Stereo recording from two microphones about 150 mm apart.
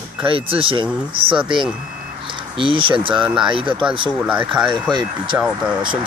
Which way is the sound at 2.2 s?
35° right (ahead or behind).